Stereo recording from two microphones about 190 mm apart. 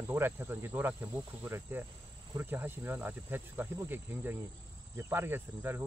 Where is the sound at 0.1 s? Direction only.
10° right (ahead or behind).